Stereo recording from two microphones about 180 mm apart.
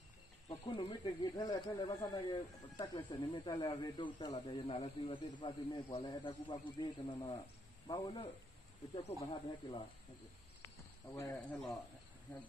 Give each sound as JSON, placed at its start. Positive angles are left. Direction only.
{"t": 0.5, "sound": "speech", "side_deg": 25}
{"t": 11.1, "sound": "speech", "side_deg": 10}